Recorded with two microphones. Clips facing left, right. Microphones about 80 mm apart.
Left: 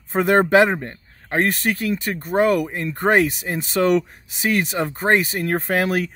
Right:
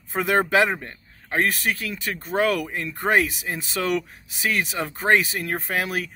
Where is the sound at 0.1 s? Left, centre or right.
Left.